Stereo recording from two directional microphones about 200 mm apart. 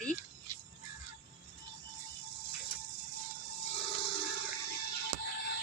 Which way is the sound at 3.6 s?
30° left (ahead or behind).